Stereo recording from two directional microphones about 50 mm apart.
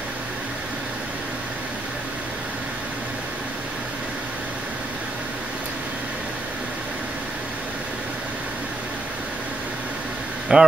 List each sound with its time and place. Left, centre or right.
10.5 s speech: centre